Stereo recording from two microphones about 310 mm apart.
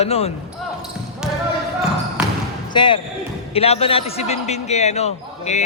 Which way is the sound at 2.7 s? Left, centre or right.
Centre.